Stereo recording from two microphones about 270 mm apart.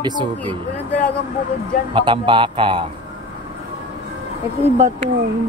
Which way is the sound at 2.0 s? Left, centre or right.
Centre.